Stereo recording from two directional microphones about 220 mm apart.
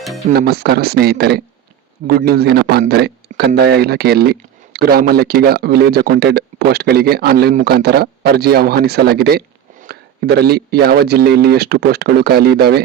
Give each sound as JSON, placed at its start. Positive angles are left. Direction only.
{"t": 0.3, "sound": "speech", "side_deg": -45}